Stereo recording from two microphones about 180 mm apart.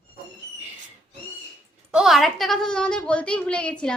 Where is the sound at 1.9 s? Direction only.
Centre (ahead or behind).